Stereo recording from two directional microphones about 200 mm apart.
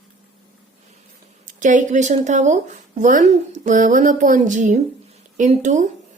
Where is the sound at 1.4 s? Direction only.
40° right (ahead or behind).